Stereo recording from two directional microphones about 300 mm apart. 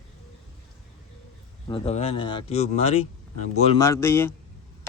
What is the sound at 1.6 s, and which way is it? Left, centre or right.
Speech, centre.